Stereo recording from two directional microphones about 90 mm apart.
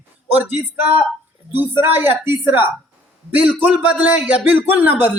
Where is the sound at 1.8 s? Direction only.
25° right (ahead or behind).